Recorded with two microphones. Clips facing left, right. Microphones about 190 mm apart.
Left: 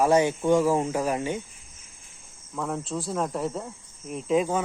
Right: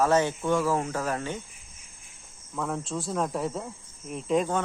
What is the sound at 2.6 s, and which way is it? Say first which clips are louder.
Speech: left 1 dB; centre (ahead or behind).